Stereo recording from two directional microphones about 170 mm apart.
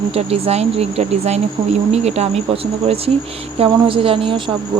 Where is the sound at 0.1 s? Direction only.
35° right (ahead or behind).